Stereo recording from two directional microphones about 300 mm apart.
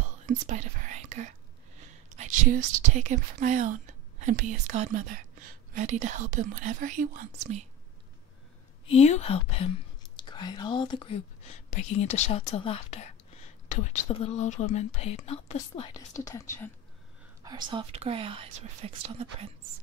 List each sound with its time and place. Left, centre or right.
0.0 s whispering: right
2.1 s speech: right
8.9 s speech: left
17.4 s speech: centre